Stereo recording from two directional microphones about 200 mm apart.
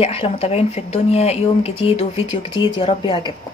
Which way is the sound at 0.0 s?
30° left (ahead or behind).